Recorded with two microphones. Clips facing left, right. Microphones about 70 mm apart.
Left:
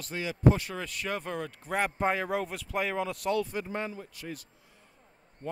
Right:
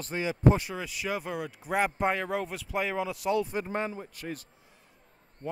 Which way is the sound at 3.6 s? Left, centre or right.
Right.